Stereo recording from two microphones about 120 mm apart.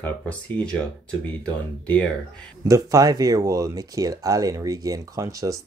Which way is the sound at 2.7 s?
30° right (ahead or behind).